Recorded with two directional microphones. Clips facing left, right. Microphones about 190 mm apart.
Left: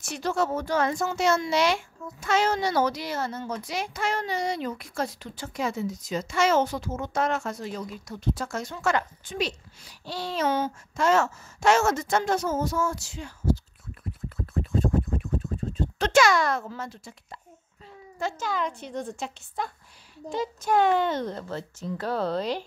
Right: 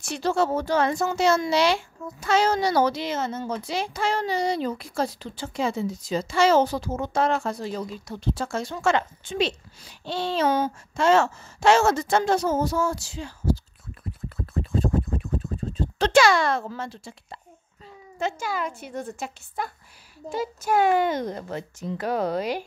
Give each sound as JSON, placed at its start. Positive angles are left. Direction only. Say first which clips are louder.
{"t": 0.0, "sound": "a child's voice", "louder": "right 3 dB", "side_deg": -30}
{"t": 14.3, "sound": "scratch", "louder": "right 1 dB", "side_deg": -35}
{"t": 15.8, "sound": "speech", "louder": "right 2 dB", "side_deg": -30}
{"t": 18.2, "sound": "speech", "louder": "right 1 dB", "side_deg": -10}